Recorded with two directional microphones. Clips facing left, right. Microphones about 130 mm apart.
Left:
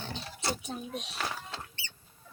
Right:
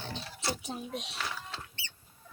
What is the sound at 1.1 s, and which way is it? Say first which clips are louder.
Speech: left 2 dB; 40° left (ahead or behind).